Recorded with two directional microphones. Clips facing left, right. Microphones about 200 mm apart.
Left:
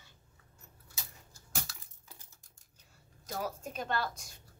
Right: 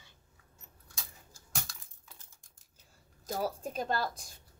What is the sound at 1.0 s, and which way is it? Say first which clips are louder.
Keys jangling: even; 5° left (ahead or behind).